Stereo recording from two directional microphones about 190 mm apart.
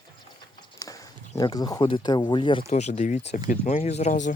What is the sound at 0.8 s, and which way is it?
Speech, 20° left (ahead or behind).